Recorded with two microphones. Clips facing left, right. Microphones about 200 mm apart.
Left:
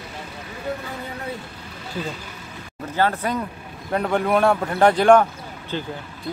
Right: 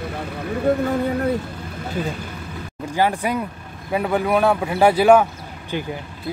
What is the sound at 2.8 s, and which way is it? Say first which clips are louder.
Speech: right 2 dB; 10° right (ahead or behind).